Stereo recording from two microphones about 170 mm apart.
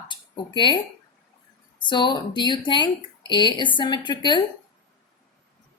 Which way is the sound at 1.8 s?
25° left (ahead or behind).